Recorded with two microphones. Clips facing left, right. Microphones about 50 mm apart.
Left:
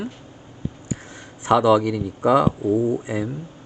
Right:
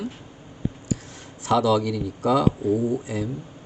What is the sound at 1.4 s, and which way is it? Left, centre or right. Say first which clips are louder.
Speech: left 4 dB; left.